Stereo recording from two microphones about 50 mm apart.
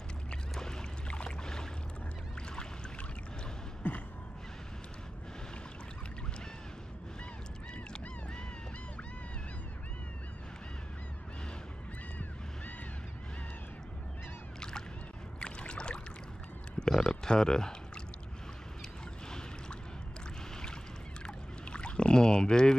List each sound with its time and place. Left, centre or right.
0.3 s boat: centre
15.4 s a sound: left
21.6 s rowboat: centre